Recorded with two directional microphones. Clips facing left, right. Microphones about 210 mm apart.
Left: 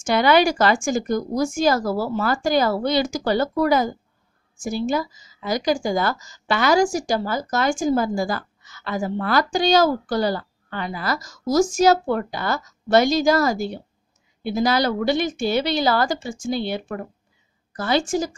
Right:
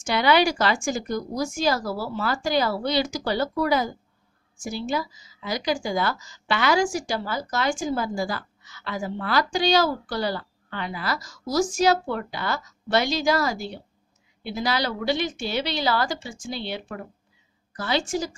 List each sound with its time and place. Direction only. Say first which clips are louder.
0.0 s a woman's voice: left 4 dB; 50° left (ahead or behind)